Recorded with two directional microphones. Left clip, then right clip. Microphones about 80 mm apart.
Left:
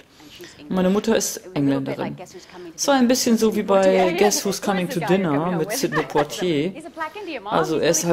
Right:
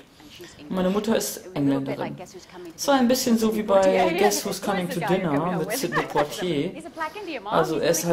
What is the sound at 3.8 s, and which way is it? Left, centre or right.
Speech, centre.